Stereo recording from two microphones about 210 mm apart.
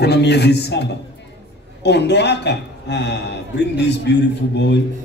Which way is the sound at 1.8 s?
55° left (ahead or behind).